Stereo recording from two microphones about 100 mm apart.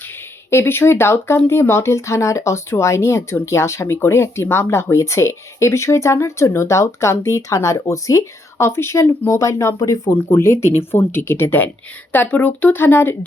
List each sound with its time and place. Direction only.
0.5 s speech: 25° left (ahead or behind)